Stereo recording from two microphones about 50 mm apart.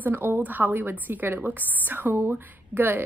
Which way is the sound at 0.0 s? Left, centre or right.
Right.